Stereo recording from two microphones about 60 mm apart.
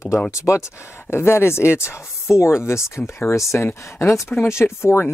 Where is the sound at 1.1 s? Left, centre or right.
Left.